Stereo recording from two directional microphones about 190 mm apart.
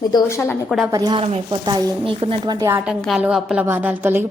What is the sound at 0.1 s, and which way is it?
Speech, 15° left (ahead or behind).